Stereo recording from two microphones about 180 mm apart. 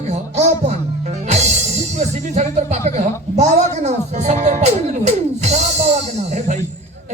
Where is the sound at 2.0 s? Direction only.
40° right (ahead or behind).